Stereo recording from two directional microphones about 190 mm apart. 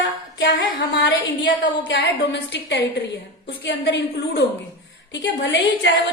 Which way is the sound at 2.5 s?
65° left (ahead or behind).